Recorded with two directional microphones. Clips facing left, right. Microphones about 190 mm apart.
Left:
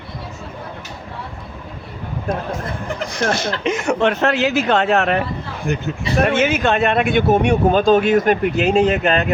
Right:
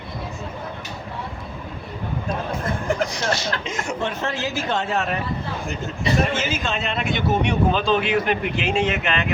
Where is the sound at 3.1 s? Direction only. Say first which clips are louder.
Left 4 dB; 55° left (ahead or behind).